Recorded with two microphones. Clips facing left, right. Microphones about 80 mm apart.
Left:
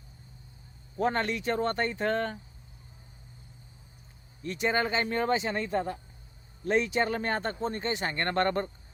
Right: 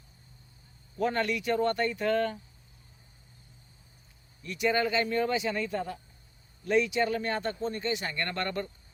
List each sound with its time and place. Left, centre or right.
0.9 s speech: left
4.4 s speech: left